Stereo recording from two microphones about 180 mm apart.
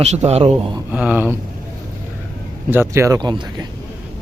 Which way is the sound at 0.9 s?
10° right (ahead or behind).